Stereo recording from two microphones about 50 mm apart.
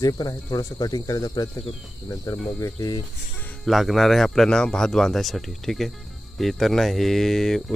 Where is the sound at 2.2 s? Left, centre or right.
Left.